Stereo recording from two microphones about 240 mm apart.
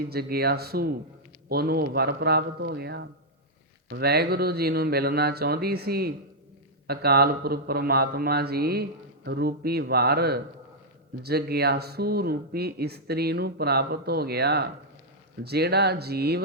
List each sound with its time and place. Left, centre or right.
0.0 s speech: right